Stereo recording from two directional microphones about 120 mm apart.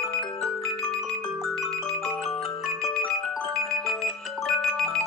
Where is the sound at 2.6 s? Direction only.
5° left (ahead or behind).